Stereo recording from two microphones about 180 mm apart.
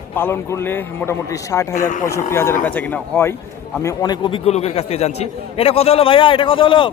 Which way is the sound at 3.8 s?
20° left (ahead or behind).